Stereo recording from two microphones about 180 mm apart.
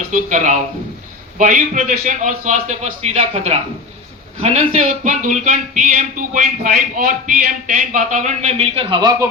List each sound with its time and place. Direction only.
0.1 s a man's voice: 45° right (ahead or behind); by 9.1 s 25° right (ahead or behind)